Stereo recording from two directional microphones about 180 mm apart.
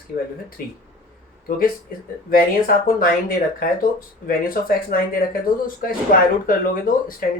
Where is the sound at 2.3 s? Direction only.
55° left (ahead or behind).